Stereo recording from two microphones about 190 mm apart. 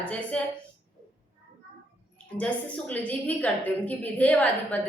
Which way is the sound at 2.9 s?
10° left (ahead or behind).